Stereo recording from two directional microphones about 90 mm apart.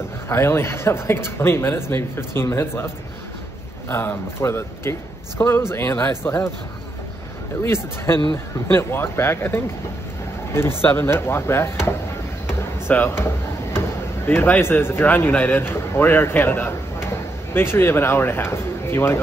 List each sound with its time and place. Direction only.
0.3 s a man's voice: 30° left (ahead or behind)
3.9 s a man's voice: 25° left (ahead or behind)
7.6 s a man's voice: 30° left (ahead or behind)
12.4 s a sound: 25° left (ahead or behind)
13.7 s a man's voice: 25° left (ahead or behind)